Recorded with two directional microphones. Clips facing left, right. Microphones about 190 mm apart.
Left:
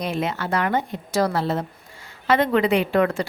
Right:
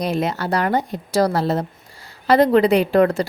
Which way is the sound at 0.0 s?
40° right (ahead or behind).